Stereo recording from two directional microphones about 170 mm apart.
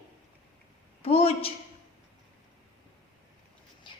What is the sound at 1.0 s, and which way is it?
Speech, 35° left (ahead or behind).